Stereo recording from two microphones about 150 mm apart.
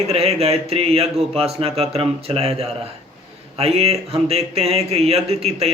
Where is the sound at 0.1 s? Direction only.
45° right (ahead or behind).